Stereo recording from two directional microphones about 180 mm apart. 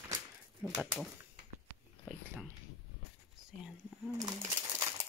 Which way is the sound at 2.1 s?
5° right (ahead or behind).